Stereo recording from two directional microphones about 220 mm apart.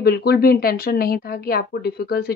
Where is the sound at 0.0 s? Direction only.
45° left (ahead or behind).